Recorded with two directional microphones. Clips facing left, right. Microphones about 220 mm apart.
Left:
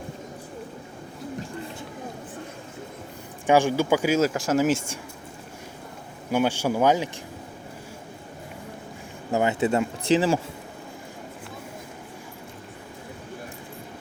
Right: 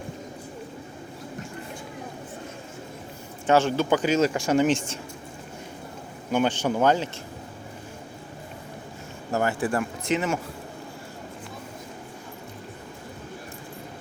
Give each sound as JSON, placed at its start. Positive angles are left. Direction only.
{"t": 3.4, "sound": "speech", "side_deg": 10}
{"t": 6.3, "sound": "speech", "side_deg": 10}
{"t": 9.3, "sound": "speech", "side_deg": 20}